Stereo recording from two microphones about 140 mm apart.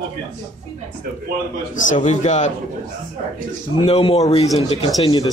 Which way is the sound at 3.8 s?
45° left (ahead or behind).